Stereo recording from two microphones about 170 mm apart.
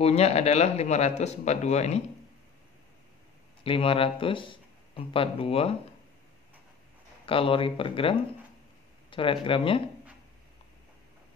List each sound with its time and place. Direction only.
0.0 s speech: 35° left (ahead or behind)
3.6 s speech: 35° left (ahead or behind)
7.2 s speech: 30° left (ahead or behind)